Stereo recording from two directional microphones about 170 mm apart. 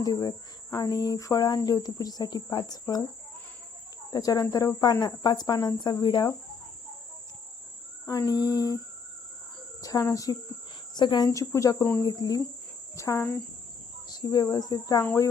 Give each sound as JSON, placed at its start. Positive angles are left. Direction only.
{"t": 0.0, "sound": "speech", "side_deg": 20}
{"t": 4.1, "sound": "speech", "side_deg": 20}
{"t": 8.0, "sound": "speech", "side_deg": 20}
{"t": 9.8, "sound": "speech", "side_deg": 20}
{"t": 13.0, "sound": "cricket", "side_deg": 15}
{"t": 14.1, "sound": "speech", "side_deg": 20}
{"t": 15.0, "sound": "cricket", "side_deg": 15}